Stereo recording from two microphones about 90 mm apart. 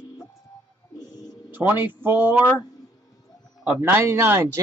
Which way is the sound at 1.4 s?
20° right (ahead or behind).